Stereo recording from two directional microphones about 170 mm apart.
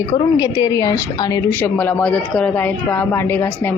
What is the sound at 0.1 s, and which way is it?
A woman's voice, 20° left (ahead or behind).